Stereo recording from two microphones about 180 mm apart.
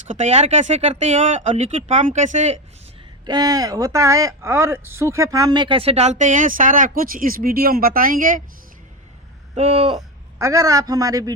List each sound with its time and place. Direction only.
0.1 s speech: 40° right (ahead or behind)
3.2 s speech: 20° right (ahead or behind); by 8.4 s 50° right (ahead or behind)
9.6 s speech: 35° right (ahead or behind)
10.3 s a man's voice: 15° right (ahead or behind)